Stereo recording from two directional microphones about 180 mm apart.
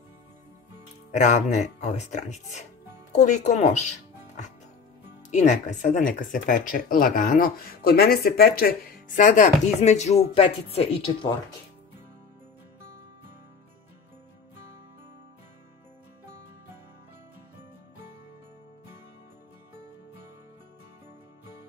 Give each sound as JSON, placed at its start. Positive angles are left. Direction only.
{"t": 1.1, "sound": "speech", "side_deg": 40}
{"t": 5.3, "sound": "speech", "side_deg": 40}